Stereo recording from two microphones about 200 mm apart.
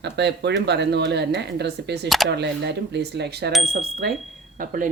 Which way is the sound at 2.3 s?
60° right (ahead or behind).